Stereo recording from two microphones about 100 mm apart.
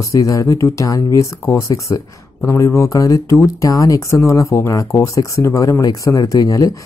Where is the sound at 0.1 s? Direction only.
35° left (ahead or behind).